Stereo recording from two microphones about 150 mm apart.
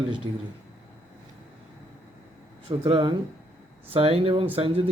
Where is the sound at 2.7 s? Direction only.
35° right (ahead or behind).